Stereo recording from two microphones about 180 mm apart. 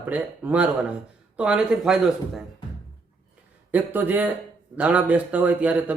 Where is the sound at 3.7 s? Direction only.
10° right (ahead or behind).